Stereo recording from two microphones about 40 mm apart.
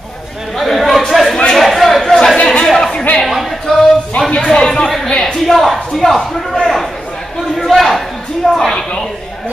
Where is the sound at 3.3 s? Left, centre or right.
Centre.